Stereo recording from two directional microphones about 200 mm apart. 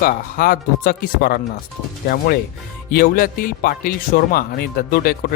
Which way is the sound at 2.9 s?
45° left (ahead or behind).